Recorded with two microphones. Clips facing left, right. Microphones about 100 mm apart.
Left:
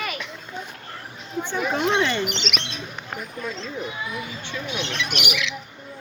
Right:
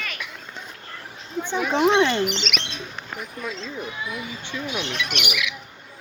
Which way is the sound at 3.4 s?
Centre (ahead or behind).